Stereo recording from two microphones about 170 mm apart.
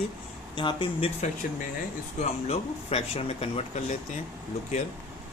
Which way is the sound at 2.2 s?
40° left (ahead or behind).